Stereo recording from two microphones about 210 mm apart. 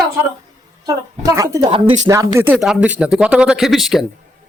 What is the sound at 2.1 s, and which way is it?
Speech, 15° right (ahead or behind).